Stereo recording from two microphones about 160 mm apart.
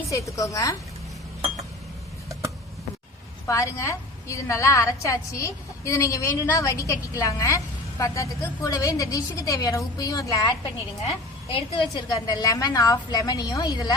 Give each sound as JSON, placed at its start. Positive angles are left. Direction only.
{"t": 0.1, "sound": "a woman's voice", "side_deg": 20}
{"t": 3.4, "sound": "a woman's voice", "side_deg": 20}